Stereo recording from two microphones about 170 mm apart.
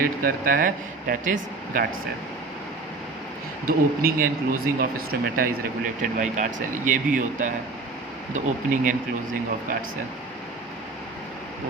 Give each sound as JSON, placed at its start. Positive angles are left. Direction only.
{"t": 0.0, "sound": "speech", "side_deg": -55}
{"t": 3.7, "sound": "a man's voice", "side_deg": -60}